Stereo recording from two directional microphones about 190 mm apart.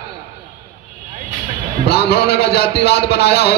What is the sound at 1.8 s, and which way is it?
A man's voice, 55° left (ahead or behind).